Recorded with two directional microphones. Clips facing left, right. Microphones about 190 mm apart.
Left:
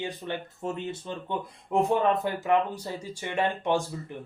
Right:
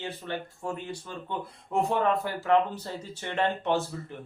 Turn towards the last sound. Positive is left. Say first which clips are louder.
# left 1 dB
turn(degrees=10)  # may be behind; listen again after turning